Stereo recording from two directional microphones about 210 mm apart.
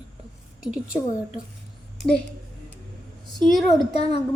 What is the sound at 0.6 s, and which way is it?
Speech, 5° right (ahead or behind).